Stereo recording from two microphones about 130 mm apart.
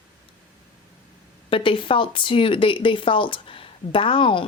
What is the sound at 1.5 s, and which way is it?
Speech, 40° left (ahead or behind).